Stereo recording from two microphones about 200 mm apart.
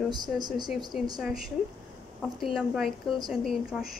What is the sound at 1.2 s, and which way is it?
A woman's voice, centre (ahead or behind).